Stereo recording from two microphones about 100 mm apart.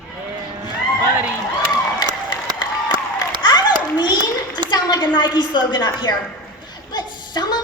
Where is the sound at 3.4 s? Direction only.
45° left (ahead or behind).